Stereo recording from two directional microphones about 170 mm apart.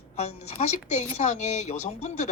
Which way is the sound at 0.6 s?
45° left (ahead or behind).